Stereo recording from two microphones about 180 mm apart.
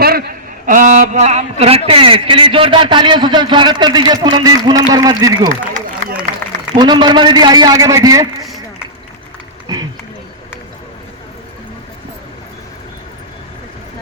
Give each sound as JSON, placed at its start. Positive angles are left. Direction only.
{"t": 0.0, "sound": "a man's voice", "side_deg": -55}
{"t": 6.7, "sound": "a man's voice", "side_deg": -25}
{"t": 9.7, "sound": "run", "side_deg": -20}